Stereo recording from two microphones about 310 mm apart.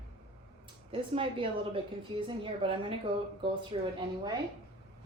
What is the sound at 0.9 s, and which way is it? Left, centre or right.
A woman's voice, centre.